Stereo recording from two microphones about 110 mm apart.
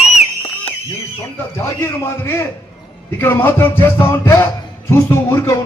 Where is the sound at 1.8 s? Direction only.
20° left (ahead or behind).